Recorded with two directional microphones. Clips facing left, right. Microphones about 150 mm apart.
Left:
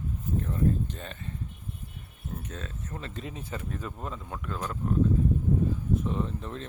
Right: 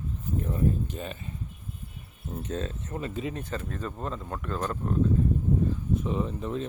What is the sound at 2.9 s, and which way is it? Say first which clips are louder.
Speech: right 7 dB; 10° right (ahead or behind).